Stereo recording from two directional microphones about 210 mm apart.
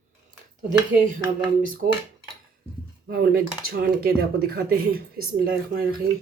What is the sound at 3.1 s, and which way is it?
Speech, 45° right (ahead or behind).